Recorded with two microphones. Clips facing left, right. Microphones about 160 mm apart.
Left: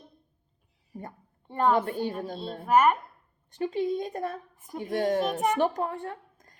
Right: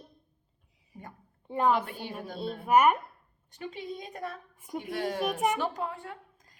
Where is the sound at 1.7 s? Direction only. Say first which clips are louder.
Left 6 dB; 50° left (ahead or behind).